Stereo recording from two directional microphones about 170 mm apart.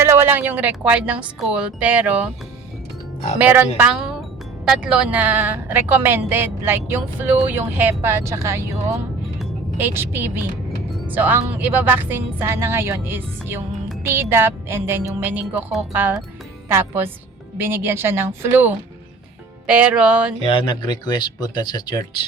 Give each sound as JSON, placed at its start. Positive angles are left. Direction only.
{"t": 0.0, "sound": "a woman's voice", "side_deg": -15}
{"t": 3.3, "sound": "a woman's voice", "side_deg": -10}
{"t": 20.4, "sound": "speech", "side_deg": 30}